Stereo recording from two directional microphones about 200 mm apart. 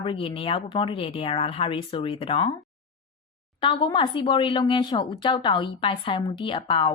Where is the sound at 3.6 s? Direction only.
25° left (ahead or behind).